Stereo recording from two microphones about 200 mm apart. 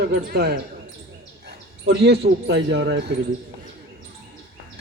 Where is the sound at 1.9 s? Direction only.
55° right (ahead or behind).